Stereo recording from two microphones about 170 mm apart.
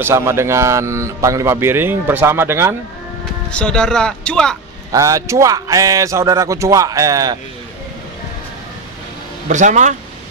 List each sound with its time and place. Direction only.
0.0 s speech: 15° right (ahead or behind)
3.4 s speech: 5° left (ahead or behind)
4.9 s speech: 20° right (ahead or behind)
9.5 s speech: 45° right (ahead or behind)